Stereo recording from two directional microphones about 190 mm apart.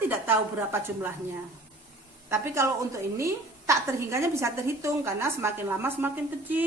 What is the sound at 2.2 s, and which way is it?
A woman's voice, 15° right (ahead or behind).